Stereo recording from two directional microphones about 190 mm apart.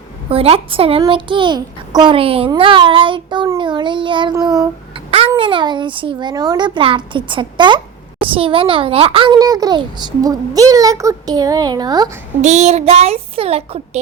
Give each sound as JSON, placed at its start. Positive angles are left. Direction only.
{"t": 0.3, "sound": "a child's voice", "side_deg": -30}
{"t": 12.4, "sound": "a child's voice", "side_deg": -35}